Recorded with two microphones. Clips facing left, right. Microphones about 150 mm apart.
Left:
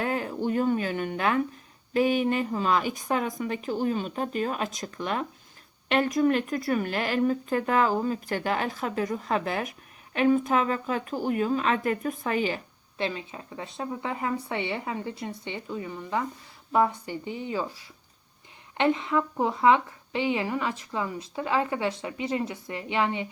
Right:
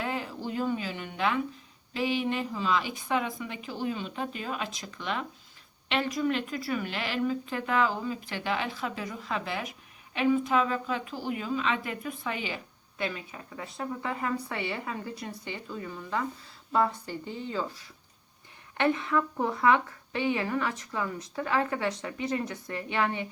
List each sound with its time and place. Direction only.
0.0 s a sound: 50° left (ahead or behind)
1.9 s speech: 50° left (ahead or behind)
13.0 s speech: 25° left (ahead or behind)